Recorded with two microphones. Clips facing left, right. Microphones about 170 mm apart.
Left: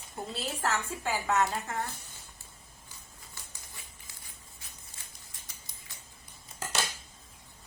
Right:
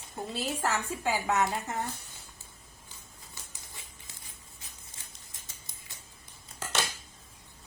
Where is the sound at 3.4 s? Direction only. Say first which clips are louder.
Even; 20° right (ahead or behind).